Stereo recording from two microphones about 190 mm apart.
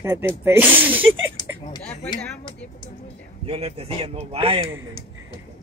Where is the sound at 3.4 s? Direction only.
30° right (ahead or behind).